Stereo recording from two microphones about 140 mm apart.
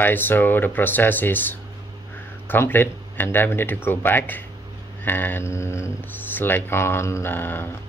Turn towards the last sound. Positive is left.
turn(degrees=15)  # may be behind; listen again after turning